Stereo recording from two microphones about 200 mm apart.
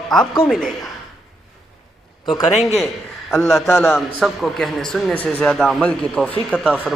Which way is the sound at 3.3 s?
15° left (ahead or behind).